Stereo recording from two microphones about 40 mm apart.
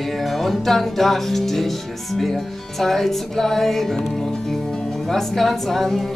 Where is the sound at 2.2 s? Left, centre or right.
Centre.